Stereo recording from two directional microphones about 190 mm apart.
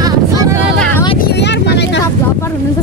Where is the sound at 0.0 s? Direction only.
20° right (ahead or behind).